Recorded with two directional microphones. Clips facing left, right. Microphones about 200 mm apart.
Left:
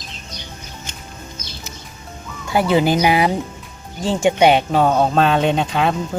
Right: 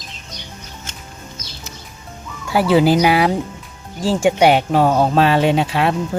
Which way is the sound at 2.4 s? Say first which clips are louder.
Right 2 dB; 5° right (ahead or behind).